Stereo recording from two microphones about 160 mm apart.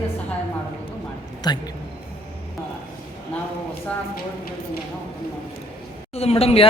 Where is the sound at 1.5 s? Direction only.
25° left (ahead or behind).